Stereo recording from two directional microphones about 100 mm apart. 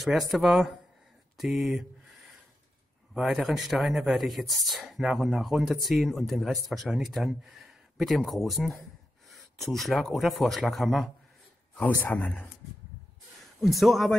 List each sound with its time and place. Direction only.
0.0 s speech: centre (ahead or behind)
3.2 s speech: centre (ahead or behind)
11.8 s speech: 15° left (ahead or behind)
13.6 s speech: centre (ahead or behind)